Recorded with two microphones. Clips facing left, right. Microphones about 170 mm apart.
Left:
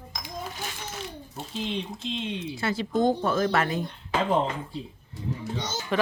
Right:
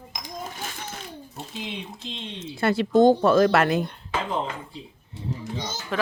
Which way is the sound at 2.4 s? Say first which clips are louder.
Right 5 dB; 55° right (ahead or behind).